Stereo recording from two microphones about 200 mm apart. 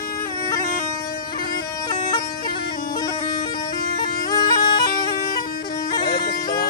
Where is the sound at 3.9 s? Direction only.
20° left (ahead or behind).